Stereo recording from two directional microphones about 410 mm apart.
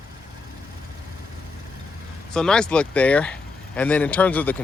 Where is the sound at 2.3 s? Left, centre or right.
Centre.